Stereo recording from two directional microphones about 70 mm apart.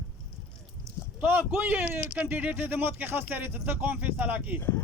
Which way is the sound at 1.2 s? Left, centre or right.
Right.